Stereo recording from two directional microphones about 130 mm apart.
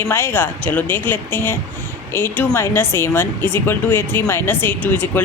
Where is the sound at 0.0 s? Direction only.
20° left (ahead or behind).